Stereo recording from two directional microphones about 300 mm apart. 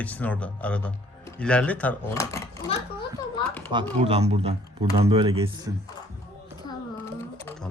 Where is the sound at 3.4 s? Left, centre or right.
Centre.